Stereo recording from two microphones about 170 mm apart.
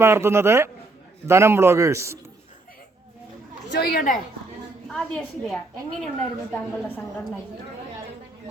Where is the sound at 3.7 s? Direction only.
65° left (ahead or behind).